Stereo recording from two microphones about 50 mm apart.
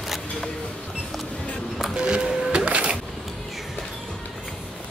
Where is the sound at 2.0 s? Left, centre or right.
Centre.